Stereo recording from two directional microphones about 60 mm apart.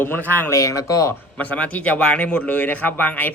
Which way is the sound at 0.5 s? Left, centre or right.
Left.